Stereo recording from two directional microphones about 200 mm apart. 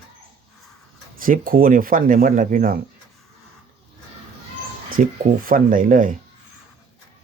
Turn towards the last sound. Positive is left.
turn(degrees=-40)  # may be behind; listen again after turning